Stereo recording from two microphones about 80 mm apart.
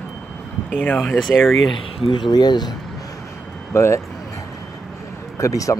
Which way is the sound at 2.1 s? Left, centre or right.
Left.